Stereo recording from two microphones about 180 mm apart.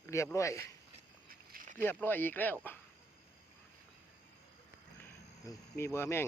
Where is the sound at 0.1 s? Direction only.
15° left (ahead or behind).